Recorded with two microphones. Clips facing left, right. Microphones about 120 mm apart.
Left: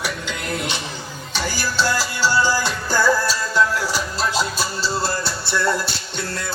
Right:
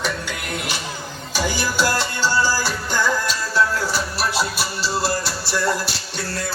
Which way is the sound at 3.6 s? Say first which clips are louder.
Even; 15° left (ahead or behind).